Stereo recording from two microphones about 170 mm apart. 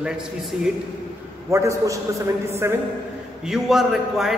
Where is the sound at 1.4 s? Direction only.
15° right (ahead or behind).